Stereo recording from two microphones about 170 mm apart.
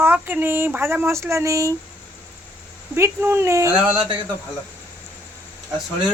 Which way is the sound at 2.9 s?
15° right (ahead or behind).